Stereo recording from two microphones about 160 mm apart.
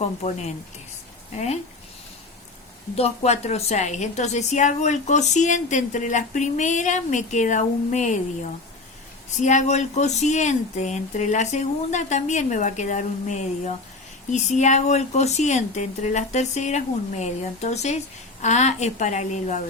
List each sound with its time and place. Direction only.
0.0 s a woman's voice: 40° left (ahead or behind)
2.9 s a woman's voice: 40° left (ahead or behind)
9.4 s a woman's voice: 50° left (ahead or behind)